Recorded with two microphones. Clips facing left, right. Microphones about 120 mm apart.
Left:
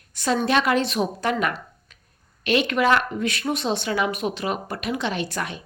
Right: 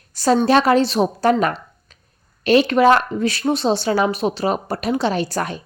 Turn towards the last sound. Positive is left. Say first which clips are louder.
# right 6 dB
turn(degrees=-40)  # may be behind; listen again after turning